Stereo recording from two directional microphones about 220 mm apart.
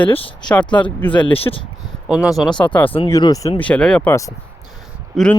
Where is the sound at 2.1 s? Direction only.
Centre (ahead or behind).